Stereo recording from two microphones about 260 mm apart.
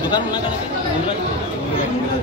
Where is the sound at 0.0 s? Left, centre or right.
Centre.